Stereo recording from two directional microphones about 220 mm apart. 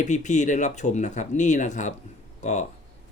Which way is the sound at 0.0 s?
35° left (ahead or behind).